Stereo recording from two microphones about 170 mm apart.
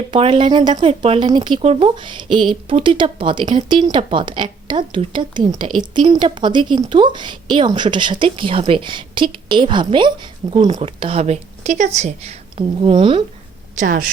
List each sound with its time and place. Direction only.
0.1 s speech: 30° right (ahead or behind)
10.7 s speech: 40° right (ahead or behind)
13.7 s a woman's voice: 55° right (ahead or behind)